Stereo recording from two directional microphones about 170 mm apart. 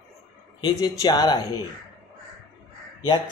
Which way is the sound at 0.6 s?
25° left (ahead or behind).